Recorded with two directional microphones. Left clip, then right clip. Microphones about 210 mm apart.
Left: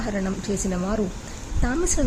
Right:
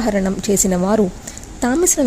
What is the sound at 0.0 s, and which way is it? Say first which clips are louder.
A woman's voice: right 9 dB; 35° right (ahead or behind).